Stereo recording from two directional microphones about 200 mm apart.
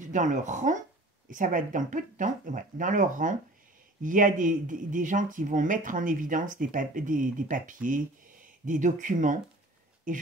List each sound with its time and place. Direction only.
0.0 s speech: 40° right (ahead or behind)